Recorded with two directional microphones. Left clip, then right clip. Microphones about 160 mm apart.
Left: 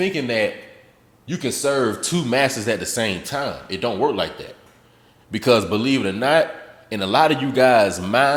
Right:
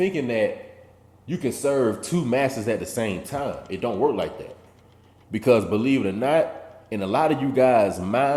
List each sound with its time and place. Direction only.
0.0 s speech: 30° left (ahead or behind)
5.3 s speech: 20° left (ahead or behind)